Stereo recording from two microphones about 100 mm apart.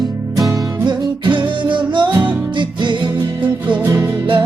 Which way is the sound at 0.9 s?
50° right (ahead or behind).